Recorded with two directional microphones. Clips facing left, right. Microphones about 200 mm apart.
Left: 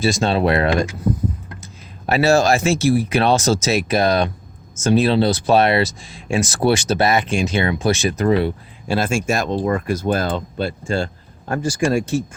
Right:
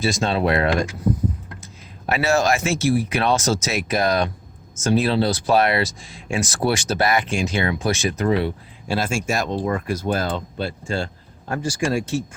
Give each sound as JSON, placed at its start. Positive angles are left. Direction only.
{"t": 0.0, "sound": "speech", "side_deg": 30}